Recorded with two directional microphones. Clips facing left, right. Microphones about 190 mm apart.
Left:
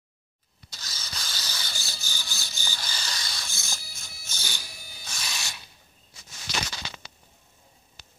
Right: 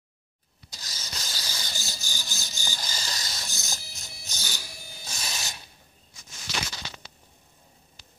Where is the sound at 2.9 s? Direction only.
40° right (ahead or behind).